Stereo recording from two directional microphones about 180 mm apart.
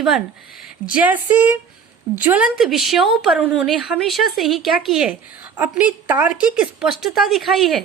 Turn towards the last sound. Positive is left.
turn(degrees=0)  # may be behind; listen again after turning